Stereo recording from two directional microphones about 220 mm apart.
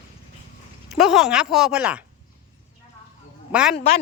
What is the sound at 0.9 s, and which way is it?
Speech, centre (ahead or behind).